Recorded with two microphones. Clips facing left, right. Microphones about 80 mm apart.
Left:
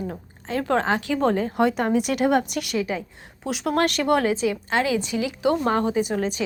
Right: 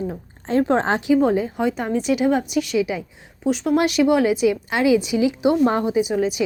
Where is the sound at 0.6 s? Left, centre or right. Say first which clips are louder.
Right 2 dB; right.